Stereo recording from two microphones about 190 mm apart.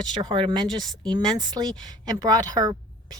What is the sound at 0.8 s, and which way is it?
Speech, centre (ahead or behind).